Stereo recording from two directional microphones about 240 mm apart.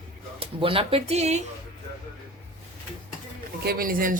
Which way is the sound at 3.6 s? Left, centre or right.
Right.